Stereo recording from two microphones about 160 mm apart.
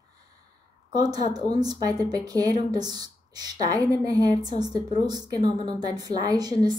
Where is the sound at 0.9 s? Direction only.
25° right (ahead or behind).